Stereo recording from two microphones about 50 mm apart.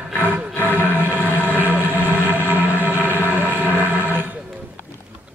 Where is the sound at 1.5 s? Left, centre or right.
Right.